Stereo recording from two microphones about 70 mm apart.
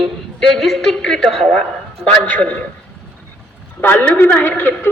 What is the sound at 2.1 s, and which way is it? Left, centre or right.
Speech, centre.